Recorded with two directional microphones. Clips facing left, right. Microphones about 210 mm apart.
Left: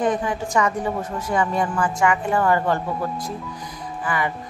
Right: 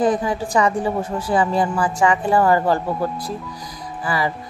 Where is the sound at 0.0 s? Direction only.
35° right (ahead or behind).